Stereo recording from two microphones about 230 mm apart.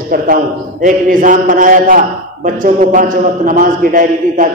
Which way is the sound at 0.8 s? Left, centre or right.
Right.